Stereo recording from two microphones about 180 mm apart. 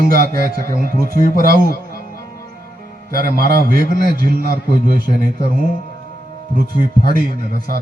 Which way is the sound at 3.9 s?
55° right (ahead or behind).